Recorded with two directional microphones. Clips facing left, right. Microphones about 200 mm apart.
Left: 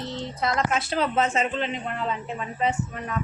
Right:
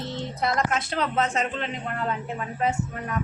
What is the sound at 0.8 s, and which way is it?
A man's voice, 5° left (ahead or behind).